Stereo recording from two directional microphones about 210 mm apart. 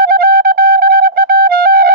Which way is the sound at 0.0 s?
45° right (ahead or behind).